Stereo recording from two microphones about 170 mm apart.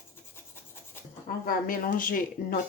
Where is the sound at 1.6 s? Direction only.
55° left (ahead or behind).